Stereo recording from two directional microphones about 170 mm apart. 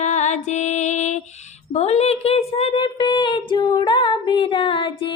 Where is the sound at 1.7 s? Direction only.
40° left (ahead or behind).